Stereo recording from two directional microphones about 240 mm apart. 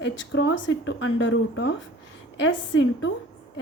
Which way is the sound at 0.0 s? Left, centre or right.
Left.